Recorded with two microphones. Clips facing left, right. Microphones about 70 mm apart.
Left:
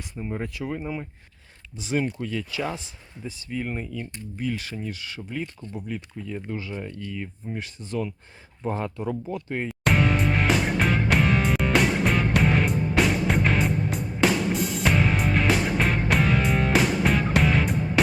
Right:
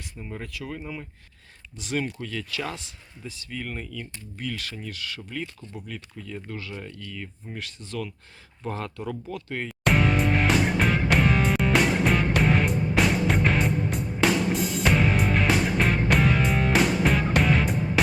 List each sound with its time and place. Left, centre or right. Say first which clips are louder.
0.2 s speech: left 6 dB; left
9.6 s music: even; centre